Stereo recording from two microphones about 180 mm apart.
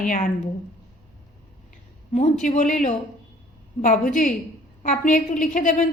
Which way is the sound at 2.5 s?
45° left (ahead or behind).